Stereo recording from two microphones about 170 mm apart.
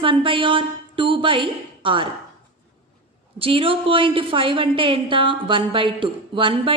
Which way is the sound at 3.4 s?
30° right (ahead or behind).